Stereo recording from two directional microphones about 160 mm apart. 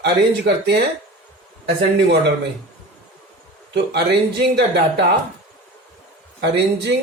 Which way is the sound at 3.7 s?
90° right.